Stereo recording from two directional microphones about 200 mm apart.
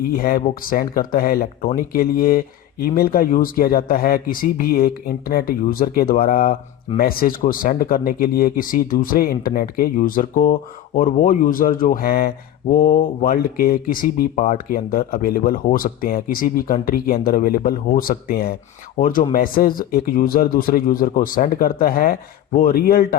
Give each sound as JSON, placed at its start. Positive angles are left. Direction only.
{"t": 0.1, "sound": "speech", "side_deg": 45}